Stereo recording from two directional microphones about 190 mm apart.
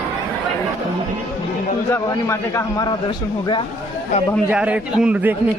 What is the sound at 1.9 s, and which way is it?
A man's voice, 15° left (ahead or behind).